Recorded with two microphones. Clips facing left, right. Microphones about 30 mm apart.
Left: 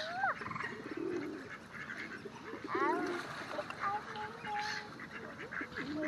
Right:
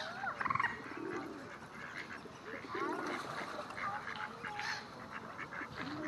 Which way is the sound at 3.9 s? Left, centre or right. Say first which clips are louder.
Left 2 dB; centre.